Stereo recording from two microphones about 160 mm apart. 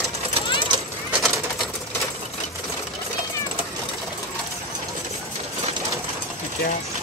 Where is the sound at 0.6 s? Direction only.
30° right (ahead or behind).